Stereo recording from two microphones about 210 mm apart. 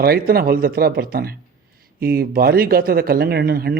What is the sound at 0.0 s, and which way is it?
Speech, 45° right (ahead or behind).